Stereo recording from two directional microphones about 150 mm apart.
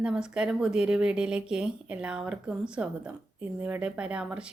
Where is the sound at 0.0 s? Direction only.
5° right (ahead or behind).